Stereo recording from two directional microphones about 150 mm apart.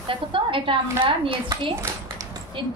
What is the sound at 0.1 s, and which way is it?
A woman's voice, 35° right (ahead or behind).